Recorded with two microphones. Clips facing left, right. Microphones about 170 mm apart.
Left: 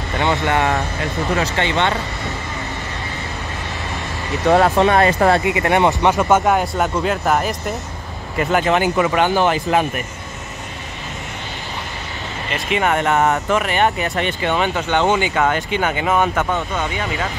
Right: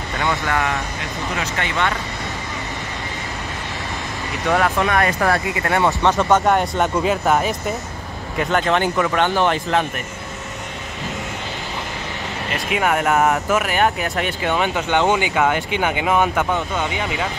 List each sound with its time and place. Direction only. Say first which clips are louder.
0.2 s speech: left 4 dB; 20° left (ahead or behind)
4.5 s speech: left 5 dB; 30° left (ahead or behind)
6.1 s speech: left 1 dB; 5° left (ahead or behind)
12.5 s speech: left 1 dB; 5° right (ahead or behind)